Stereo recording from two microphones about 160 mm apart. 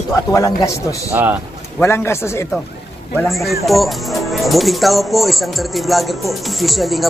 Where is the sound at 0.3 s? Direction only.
20° left (ahead or behind).